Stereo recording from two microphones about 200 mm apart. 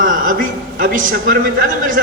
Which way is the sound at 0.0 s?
45° right (ahead or behind).